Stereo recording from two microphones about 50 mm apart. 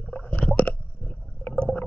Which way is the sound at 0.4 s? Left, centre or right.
Left.